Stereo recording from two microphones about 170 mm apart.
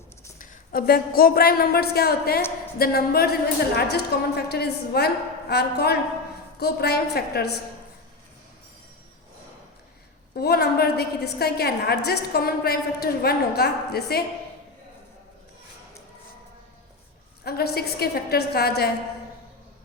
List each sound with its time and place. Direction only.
0.3 s a woman's voice: 55° left (ahead or behind)
10.3 s a woman's voice: 65° left (ahead or behind)
17.4 s a woman's voice: 65° left (ahead or behind)